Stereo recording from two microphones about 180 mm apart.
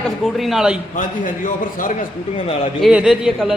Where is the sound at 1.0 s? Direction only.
45° left (ahead or behind).